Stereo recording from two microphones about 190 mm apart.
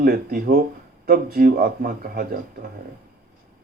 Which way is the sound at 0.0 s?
50° right (ahead or behind).